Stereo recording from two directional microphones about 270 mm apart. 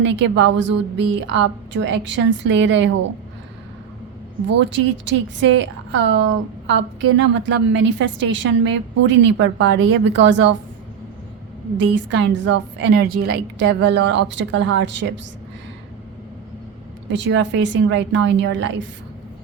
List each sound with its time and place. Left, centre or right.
0.0 s a woman's voice: right
4.6 s a woman's voice: right
11.8 s a woman's voice: right
17.1 s a woman's voice: right